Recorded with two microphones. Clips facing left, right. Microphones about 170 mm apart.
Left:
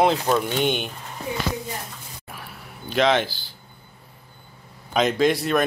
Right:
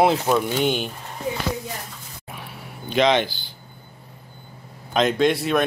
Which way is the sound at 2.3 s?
Centre (ahead or behind).